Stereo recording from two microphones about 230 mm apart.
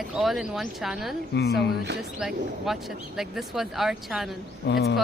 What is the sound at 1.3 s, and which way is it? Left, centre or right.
Speech, left.